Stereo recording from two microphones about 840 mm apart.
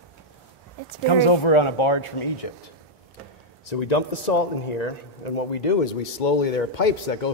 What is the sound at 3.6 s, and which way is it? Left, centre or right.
Speech, left.